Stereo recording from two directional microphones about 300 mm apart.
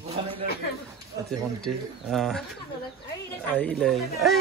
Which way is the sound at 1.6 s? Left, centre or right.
Centre.